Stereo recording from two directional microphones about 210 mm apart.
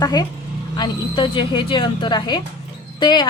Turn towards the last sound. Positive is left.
turn(degrees=20)  # may be behind; listen again after turning